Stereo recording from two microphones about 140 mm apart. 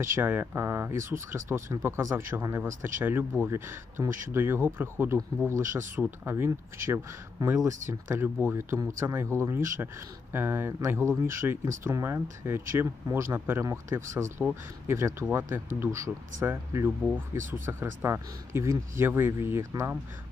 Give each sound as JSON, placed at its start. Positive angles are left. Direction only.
{"t": 0.0, "sound": "speech", "side_deg": -15}